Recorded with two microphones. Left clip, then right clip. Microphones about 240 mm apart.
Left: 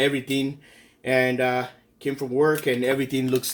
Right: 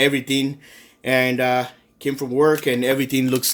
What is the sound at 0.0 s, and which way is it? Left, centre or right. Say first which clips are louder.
Speech: right 4 dB; right.